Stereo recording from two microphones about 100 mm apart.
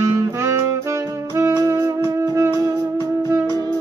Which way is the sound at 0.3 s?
30° right (ahead or behind).